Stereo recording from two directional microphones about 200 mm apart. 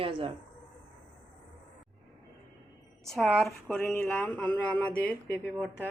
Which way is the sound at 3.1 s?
Centre (ahead or behind).